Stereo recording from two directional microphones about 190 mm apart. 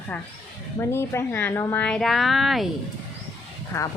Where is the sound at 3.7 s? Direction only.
15° left (ahead or behind).